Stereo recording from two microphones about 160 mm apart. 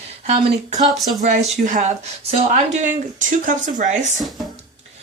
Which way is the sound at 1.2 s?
50° right (ahead or behind).